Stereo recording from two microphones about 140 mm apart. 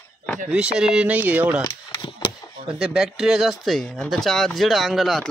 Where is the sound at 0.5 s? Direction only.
5° right (ahead or behind).